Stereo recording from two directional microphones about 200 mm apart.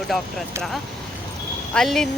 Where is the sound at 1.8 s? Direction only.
Centre (ahead or behind).